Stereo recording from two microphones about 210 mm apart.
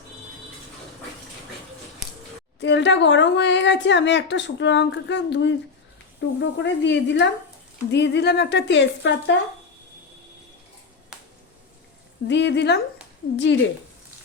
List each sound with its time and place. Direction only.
2.6 s a woman's voice: 55° left (ahead or behind)
12.3 s a woman's voice: 55° left (ahead or behind)